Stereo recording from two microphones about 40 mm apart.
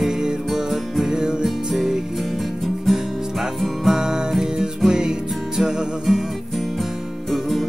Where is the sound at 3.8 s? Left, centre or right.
Centre.